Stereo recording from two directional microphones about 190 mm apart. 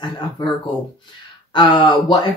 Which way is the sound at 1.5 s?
25° left (ahead or behind).